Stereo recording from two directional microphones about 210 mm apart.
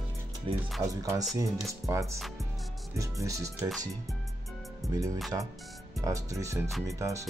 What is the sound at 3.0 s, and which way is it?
Speech, 15° right (ahead or behind).